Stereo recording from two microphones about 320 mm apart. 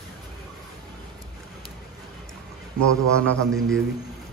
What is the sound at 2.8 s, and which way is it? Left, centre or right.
Mantra, centre.